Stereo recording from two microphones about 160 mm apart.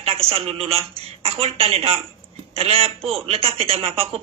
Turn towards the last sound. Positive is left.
turn(degrees=-35)  # may be behind; listen again after turning